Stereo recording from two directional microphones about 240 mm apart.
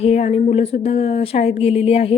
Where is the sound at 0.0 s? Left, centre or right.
Left.